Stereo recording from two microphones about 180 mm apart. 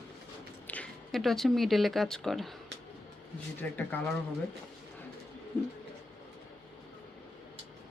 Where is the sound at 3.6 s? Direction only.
10° left (ahead or behind).